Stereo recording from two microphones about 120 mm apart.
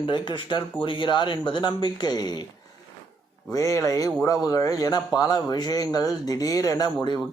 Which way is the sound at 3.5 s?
25° left (ahead or behind).